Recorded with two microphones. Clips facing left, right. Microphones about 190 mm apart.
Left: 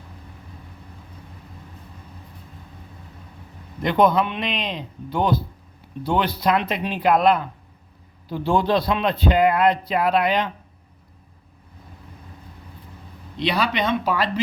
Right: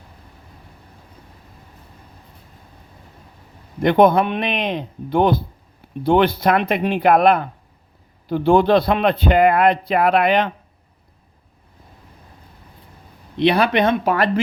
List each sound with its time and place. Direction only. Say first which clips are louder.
3.8 s a man's voice: right 5 dB; 55° right (ahead or behind)
13.3 s a man's voice: right 7 dB; 55° right (ahead or behind)